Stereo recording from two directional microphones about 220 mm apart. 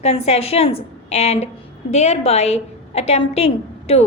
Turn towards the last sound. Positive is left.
turn(degrees=30)  # may be behind; listen again after turning